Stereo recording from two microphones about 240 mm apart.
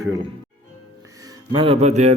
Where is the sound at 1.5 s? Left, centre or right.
Right.